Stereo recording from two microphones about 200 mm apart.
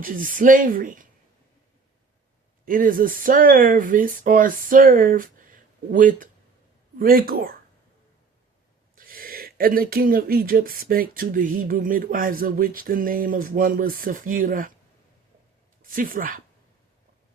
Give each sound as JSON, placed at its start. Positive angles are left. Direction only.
{"t": 0.0, "sound": "speech", "side_deg": -40}
{"t": 2.6, "sound": "speech", "side_deg": -45}
{"t": 9.0, "sound": "speech", "side_deg": -45}
{"t": 15.8, "sound": "speech", "side_deg": -45}